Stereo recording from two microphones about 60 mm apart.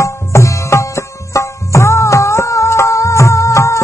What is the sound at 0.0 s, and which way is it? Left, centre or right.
Music, left.